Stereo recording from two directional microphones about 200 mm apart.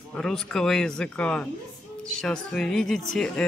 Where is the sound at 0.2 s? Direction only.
5° left (ahead or behind).